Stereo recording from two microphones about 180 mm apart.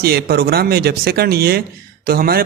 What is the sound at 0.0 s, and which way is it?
Speech, 60° right (ahead or behind).